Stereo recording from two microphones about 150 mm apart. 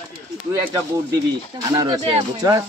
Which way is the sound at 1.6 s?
25° right (ahead or behind).